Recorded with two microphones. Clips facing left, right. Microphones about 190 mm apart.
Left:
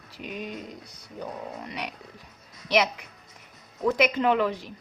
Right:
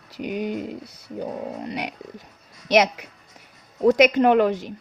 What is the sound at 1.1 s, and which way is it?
Speech, 35° right (ahead or behind).